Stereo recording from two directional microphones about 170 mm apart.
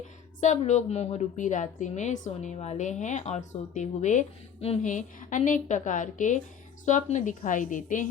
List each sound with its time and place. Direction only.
0.3 s a woman's voice: 45° left (ahead or behind)